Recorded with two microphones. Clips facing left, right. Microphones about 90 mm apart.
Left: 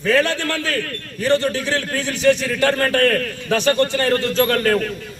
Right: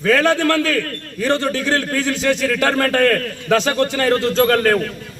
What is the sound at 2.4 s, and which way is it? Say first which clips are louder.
Speech: right 1 dB; 80° right.